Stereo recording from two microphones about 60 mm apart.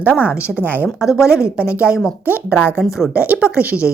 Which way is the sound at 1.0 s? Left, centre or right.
Centre.